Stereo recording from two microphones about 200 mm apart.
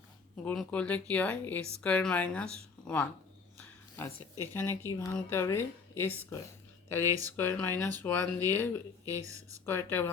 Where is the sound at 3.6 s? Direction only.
10° left (ahead or behind).